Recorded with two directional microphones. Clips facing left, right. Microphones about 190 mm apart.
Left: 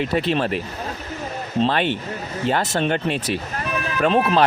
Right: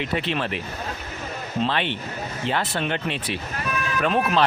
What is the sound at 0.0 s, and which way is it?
Speech, 40° left (ahead or behind).